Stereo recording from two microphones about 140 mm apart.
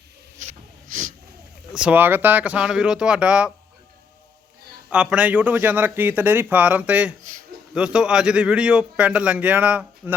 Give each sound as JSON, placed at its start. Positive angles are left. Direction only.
{"t": 0.3, "sound": "snort", "side_deg": -65}
{"t": 1.7, "sound": "speech", "side_deg": -10}
{"t": 4.9, "sound": "speech", "side_deg": -10}